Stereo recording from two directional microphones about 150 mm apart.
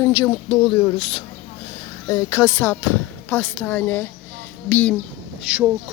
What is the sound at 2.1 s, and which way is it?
A woman's voice, 20° left (ahead or behind).